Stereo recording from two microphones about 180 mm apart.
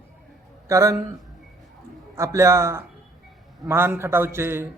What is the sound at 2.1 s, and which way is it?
Speech, 15° right (ahead or behind).